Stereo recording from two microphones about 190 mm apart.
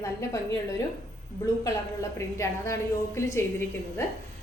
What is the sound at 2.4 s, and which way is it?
A woman's voice, 15° left (ahead or behind).